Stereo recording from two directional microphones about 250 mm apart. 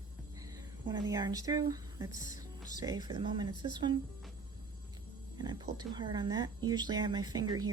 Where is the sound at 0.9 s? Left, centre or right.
Centre.